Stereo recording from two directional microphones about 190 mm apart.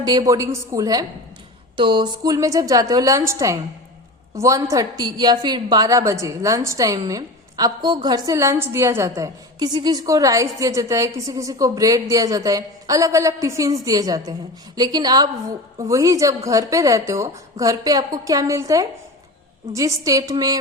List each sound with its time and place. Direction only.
0.0 s a woman's voice: 20° right (ahead or behind)